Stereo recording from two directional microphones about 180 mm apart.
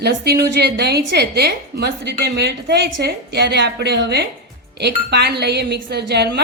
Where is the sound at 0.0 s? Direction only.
65° right (ahead or behind).